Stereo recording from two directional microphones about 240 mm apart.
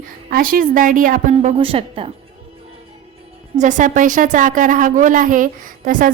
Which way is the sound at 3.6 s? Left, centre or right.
Right.